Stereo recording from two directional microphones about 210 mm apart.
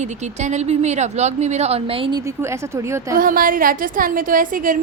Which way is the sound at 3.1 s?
40° right (ahead or behind).